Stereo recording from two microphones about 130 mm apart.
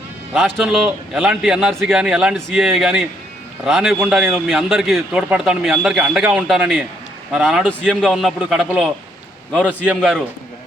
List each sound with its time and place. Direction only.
0.3 s a man's voice: centre (ahead or behind)
7.7 s a man's voice: 10° left (ahead or behind)
8.0 s a man's voice: centre (ahead or behind)